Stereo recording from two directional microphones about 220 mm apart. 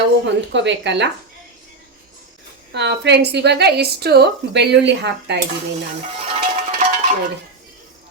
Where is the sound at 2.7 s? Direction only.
50° right (ahead or behind).